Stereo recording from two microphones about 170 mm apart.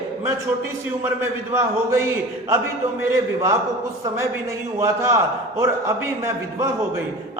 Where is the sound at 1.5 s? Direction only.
15° right (ahead or behind).